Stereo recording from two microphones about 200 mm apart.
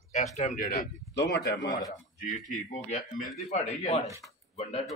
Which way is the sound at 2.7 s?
35° left (ahead or behind).